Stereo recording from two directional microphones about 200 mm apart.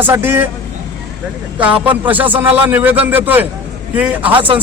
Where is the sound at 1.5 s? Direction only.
5° right (ahead or behind).